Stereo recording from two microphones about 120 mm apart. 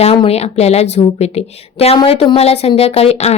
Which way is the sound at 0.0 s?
55° left (ahead or behind).